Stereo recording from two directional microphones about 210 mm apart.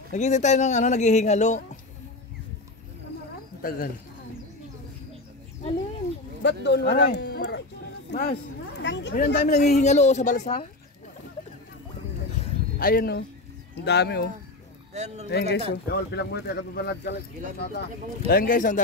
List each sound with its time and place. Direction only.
0.1 s a man's voice: 35° left (ahead or behind)
3.6 s speech: 45° left (ahead or behind)
6.4 s speech: 55° left (ahead or behind)
9.1 s speech: 45° left (ahead or behind)
9.7 s a man's voice: 35° left (ahead or behind)
12.7 s speech: 45° left (ahead or behind)